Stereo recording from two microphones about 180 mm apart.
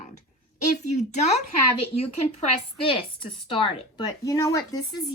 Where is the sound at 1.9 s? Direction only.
35° left (ahead or behind).